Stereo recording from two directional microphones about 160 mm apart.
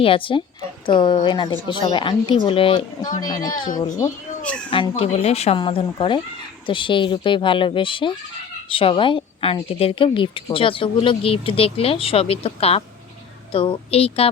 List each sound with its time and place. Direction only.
0.0 s a woman's voice: 35° left (ahead or behind)
4.7 s speech: 30° left (ahead or behind)